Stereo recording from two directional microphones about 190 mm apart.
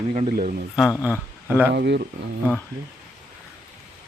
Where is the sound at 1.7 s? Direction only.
60° right (ahead or behind).